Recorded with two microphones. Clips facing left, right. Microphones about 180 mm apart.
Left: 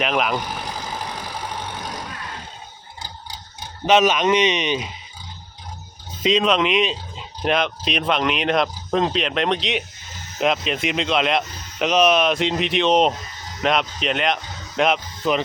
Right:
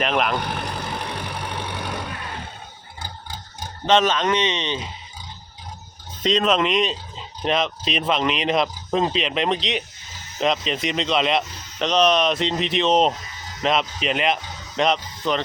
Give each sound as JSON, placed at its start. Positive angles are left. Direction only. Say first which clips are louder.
{"t": 0.0, "sound": "speech", "louder": "even", "side_deg": 0}
{"t": 0.3, "sound": "vehicle", "louder": "right 1 dB", "side_deg": -60}
{"t": 3.0, "sound": "tick-tock", "louder": "right 1 dB", "side_deg": -50}
{"t": 3.8, "sound": "speech", "louder": "left 2 dB", "side_deg": 10}
{"t": 6.2, "sound": "speech", "louder": "left 1 dB", "side_deg": 0}